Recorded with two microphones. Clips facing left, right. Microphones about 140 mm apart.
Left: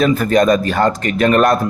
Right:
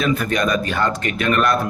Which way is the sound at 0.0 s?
35° left (ahead or behind).